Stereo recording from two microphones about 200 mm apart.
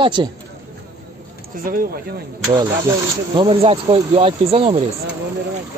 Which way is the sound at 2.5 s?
20° right (ahead or behind).